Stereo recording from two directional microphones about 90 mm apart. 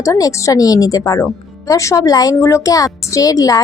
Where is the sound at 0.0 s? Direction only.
35° left (ahead or behind).